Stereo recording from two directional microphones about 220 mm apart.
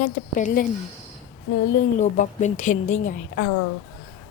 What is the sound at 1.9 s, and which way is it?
A woman's voice, 35° left (ahead or behind).